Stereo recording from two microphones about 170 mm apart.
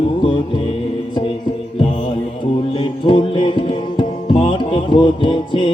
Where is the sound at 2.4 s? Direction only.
30° left (ahead or behind).